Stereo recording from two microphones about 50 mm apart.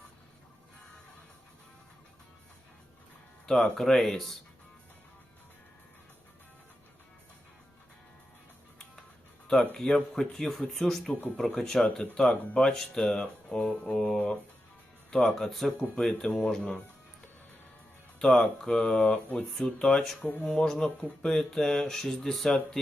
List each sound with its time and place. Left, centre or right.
3.4 s speech: centre
9.8 s speech: centre
10.3 s speech: centre
13.1 s speech: left
13.7 s speech: centre
18.2 s speech: centre